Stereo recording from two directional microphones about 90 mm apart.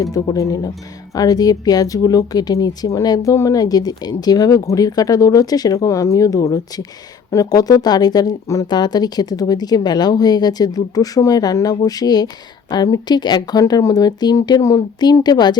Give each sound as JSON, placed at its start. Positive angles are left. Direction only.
{"t": 0.0, "sound": "speech", "side_deg": 40}